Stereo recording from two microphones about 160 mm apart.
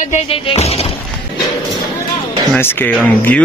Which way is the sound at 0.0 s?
40° left (ahead or behind).